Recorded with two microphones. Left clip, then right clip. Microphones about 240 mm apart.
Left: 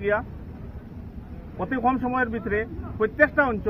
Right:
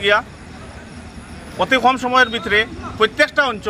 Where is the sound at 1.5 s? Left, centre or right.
Right.